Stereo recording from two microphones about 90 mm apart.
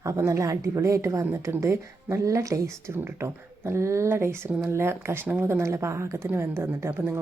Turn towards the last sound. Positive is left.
turn(degrees=-30)  # may be behind; listen again after turning